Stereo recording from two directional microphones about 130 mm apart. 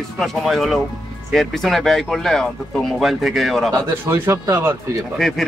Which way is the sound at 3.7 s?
20° right (ahead or behind).